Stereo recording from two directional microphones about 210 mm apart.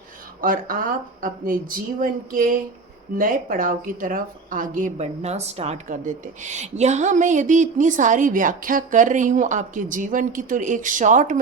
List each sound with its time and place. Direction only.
0.4 s a woman's voice: 40° right (ahead or behind)